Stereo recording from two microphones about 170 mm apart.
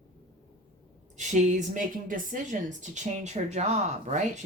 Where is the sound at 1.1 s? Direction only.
45° right (ahead or behind).